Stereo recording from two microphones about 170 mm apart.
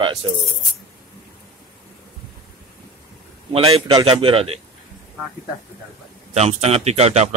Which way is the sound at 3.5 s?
30° right (ahead or behind).